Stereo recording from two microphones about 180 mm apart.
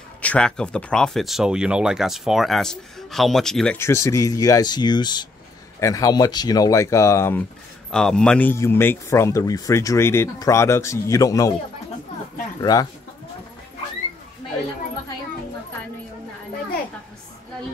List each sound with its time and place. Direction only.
0.2 s speech: 5° left (ahead or behind)
3.7 s speech: 15° left (ahead or behind)
7.9 s speech: 5° left (ahead or behind)